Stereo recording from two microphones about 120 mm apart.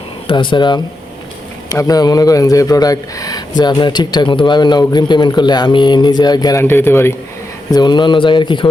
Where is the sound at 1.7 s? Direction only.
30° left (ahead or behind).